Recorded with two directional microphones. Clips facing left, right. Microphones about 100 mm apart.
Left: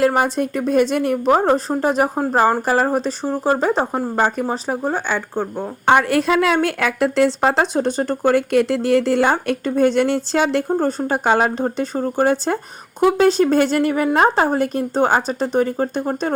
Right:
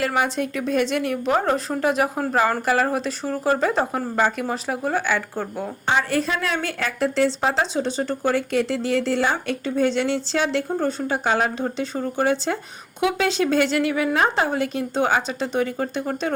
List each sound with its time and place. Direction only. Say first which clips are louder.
0.0 s a woman's voice: left 5 dB; 45° left (ahead or behind); by 5.6 s 25° left (ahead or behind)
5.8 s a woman's voice: left 7 dB; 60° left (ahead or behind); by 16.3 s 35° left (ahead or behind)